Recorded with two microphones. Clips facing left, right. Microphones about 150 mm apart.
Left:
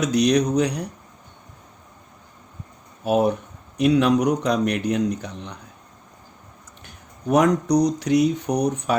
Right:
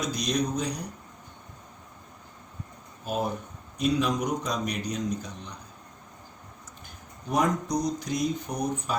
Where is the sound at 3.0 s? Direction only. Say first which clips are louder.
Left 10 dB; 75° left (ahead or behind).